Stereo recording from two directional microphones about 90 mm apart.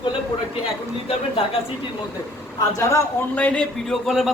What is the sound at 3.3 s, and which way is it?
Speech, 15° left (ahead or behind).